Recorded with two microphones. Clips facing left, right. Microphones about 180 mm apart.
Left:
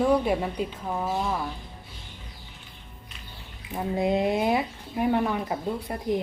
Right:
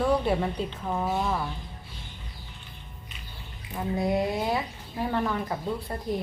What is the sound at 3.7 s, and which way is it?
Speech, 20° left (ahead or behind).